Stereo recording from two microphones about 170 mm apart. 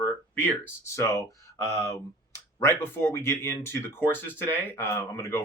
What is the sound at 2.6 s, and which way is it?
Speech, 15° left (ahead or behind).